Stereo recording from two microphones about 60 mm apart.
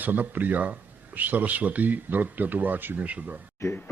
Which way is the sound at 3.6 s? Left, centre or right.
Left.